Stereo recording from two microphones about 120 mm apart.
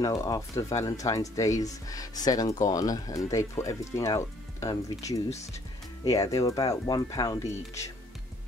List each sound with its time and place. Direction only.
0.0 s speech: 30° left (ahead or behind)
5.3 s speech: 70° left (ahead or behind)
6.0 s speech: 30° left (ahead or behind)